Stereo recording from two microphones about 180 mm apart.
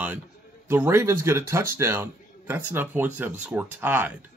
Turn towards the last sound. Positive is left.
turn(degrees=-10)  # may be behind; listen again after turning